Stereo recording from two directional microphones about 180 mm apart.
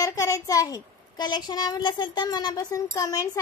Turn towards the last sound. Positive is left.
turn(degrees=20)  # may be behind; listen again after turning